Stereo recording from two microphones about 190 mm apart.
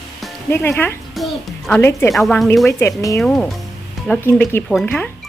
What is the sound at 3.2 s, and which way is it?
Speech, 5° left (ahead or behind).